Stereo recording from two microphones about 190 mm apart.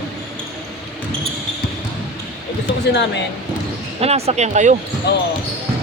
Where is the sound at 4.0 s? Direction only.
35° right (ahead or behind).